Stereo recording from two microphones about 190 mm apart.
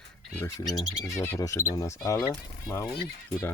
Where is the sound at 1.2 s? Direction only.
15° left (ahead or behind).